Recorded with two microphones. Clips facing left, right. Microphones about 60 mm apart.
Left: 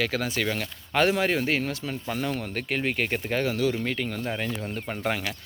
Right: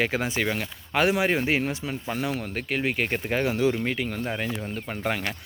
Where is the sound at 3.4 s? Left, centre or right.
Centre.